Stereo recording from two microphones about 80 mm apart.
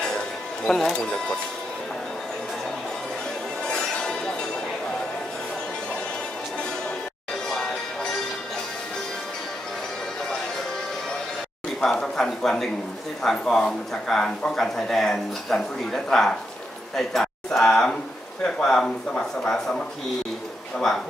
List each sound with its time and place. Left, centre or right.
0.7 s a man's voice: centre
3.6 s music: centre
7.4 s music: centre
11.8 s a man's voice: centre